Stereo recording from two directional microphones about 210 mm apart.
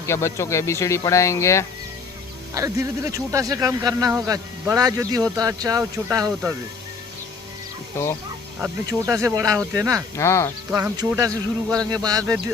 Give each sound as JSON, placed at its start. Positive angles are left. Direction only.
{"t": 0.0, "sound": "speech", "side_deg": 10}
{"t": 2.6, "sound": "speech", "side_deg": -15}
{"t": 8.5, "sound": "speech", "side_deg": -10}
{"t": 10.2, "sound": "speech", "side_deg": 15}
{"t": 10.8, "sound": "speech", "side_deg": -15}